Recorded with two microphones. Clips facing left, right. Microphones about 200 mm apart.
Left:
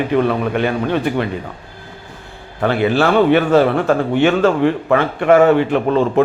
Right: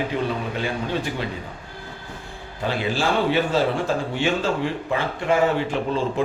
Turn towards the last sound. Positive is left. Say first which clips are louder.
# left 8 dB
turn(degrees=65)  # may be behind; listen again after turning